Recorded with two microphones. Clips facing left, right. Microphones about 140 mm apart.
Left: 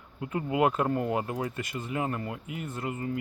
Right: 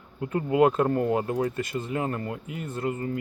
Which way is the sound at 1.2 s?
35° right (ahead or behind).